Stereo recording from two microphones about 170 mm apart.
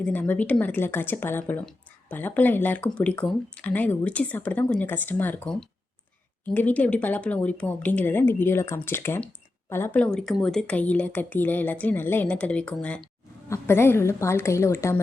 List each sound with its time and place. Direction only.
0.0 s speech: 10° left (ahead or behind)